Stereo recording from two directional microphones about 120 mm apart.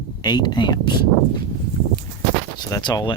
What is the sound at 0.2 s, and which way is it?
Speech, 35° left (ahead or behind).